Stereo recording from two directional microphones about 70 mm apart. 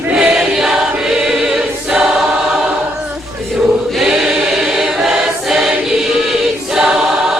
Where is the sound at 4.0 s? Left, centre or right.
Centre.